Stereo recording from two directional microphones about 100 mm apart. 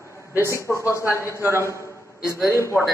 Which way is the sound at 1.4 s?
25° right (ahead or behind).